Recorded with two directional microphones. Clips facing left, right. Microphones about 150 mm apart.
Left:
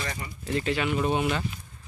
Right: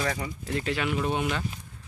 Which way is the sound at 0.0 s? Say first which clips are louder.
Right 5 dB; 90° right.